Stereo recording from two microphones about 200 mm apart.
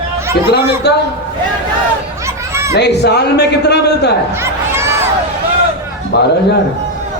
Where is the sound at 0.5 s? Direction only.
55° left (ahead or behind).